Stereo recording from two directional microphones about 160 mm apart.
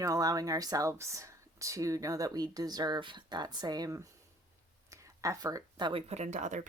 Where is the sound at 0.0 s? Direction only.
20° right (ahead or behind).